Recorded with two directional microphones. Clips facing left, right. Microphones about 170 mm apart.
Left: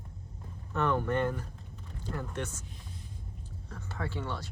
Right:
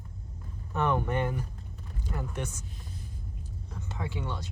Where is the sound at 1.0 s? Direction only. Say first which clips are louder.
Even; 10° right (ahead or behind).